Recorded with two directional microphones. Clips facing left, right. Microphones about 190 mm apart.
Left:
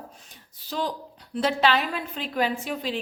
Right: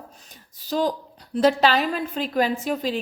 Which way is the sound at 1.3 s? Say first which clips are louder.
Right 4 dB; 40° right (ahead or behind).